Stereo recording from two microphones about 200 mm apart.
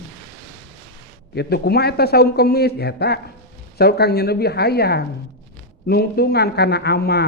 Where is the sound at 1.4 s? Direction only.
55° left (ahead or behind).